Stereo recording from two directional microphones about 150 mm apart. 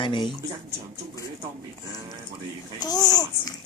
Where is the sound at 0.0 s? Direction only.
30° left (ahead or behind).